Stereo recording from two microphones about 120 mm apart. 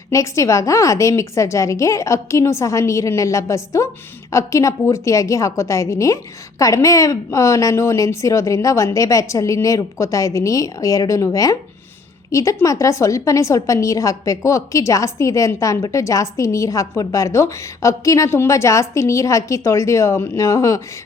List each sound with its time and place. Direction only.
0.1 s a woman's voice: 25° left (ahead or behind)